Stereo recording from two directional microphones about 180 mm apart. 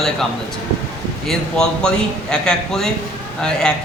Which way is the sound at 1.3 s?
5° left (ahead or behind).